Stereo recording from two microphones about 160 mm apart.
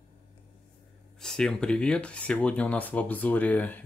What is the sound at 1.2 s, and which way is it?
Speech, 5° left (ahead or behind).